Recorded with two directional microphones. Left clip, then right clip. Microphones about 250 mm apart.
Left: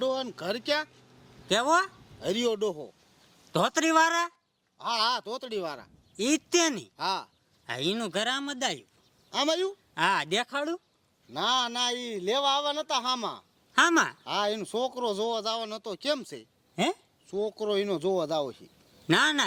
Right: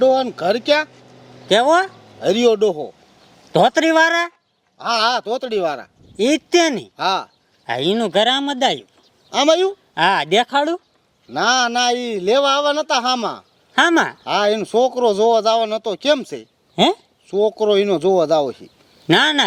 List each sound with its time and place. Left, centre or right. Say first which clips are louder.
0.0 s speech: right 15 dB; centre
1.5 s speech: right 11 dB; centre
2.2 s a man's voice: right 13 dB; centre
3.5 s speech: right 11 dB; centre
4.8 s speech: right 10 dB; centre
6.1 s speech: right 11 dB; centre
6.9 s speech: right 12 dB; centre
7.7 s speech: right 12 dB; centre
9.9 s speech: right 11 dB; centre
11.3 s a man's voice: right 11 dB; centre
13.7 s speech: right 8 dB; centre
14.3 s speech: right 12 dB; centre
19.0 s speech: right 10 dB; centre